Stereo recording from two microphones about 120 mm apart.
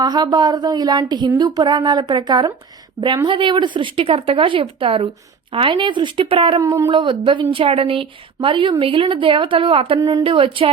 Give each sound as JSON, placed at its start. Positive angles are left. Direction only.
{"t": 0.0, "sound": "speech", "side_deg": -35}
{"t": 6.6, "sound": "speech", "side_deg": -25}
{"t": 6.9, "sound": "speech", "side_deg": -45}
{"t": 10.0, "sound": "speech", "side_deg": -30}
{"t": 10.2, "sound": "speech", "side_deg": -50}